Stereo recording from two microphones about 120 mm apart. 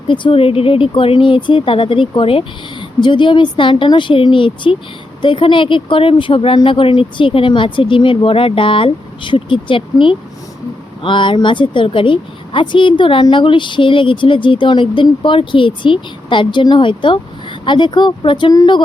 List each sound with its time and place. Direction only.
0.1 s speech: 45° left (ahead or behind)